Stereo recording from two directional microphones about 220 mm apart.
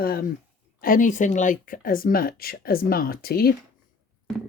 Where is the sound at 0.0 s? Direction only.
45° left (ahead or behind).